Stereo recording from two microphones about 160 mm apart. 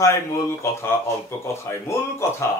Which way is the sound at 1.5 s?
15° left (ahead or behind).